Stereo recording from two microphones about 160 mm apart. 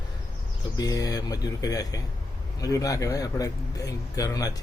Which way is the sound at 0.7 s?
20° left (ahead or behind).